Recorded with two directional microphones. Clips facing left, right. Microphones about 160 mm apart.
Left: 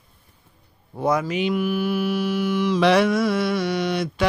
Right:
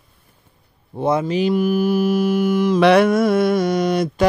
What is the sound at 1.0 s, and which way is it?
Mantra, 25° right (ahead or behind).